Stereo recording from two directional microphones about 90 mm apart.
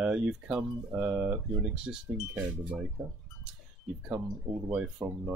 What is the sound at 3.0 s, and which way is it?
Speech, 15° right (ahead or behind).